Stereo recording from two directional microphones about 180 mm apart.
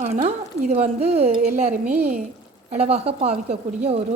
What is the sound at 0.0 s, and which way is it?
A woman's voice, 40° right (ahead or behind).